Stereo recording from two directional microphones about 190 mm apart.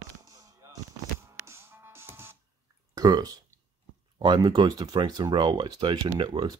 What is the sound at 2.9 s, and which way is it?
Speech, 20° right (ahead or behind).